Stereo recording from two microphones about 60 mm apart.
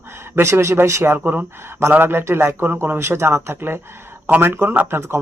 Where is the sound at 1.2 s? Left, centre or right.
Right.